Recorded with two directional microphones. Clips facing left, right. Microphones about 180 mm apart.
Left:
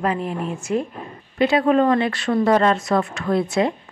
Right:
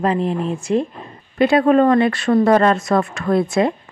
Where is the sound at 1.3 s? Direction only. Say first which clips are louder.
Right 3 dB; 50° right (ahead or behind).